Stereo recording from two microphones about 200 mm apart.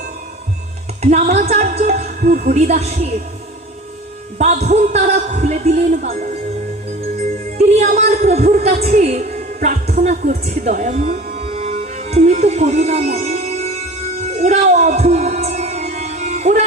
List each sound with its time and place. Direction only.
1.1 s a woman's voice: 35° right (ahead or behind)
4.4 s a woman's voice: 35° right (ahead or behind)
7.6 s a woman's voice: 35° right (ahead or behind)
10.6 s music: 40° right (ahead or behind)
11.8 s music: 30° right (ahead or behind)